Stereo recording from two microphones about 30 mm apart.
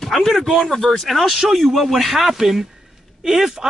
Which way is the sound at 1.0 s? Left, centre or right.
Centre.